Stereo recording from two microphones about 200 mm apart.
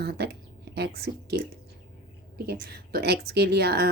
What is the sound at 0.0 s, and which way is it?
Speech, 55° right (ahead or behind).